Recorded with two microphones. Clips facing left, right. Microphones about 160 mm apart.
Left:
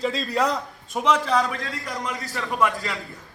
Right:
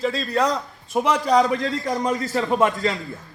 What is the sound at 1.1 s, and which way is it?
A man's voice, 15° right (ahead or behind).